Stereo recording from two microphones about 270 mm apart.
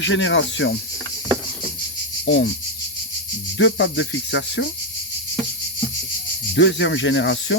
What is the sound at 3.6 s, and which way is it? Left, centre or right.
Cricket, left.